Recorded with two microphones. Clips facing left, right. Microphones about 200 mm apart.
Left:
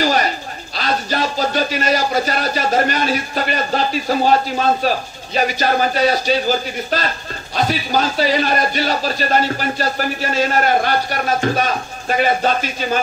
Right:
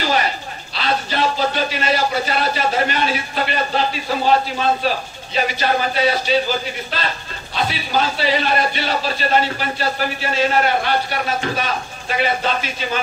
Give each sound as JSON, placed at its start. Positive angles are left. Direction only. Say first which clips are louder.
{"t": 0.7, "sound": "speech", "louder": "left 1 dB", "side_deg": 45}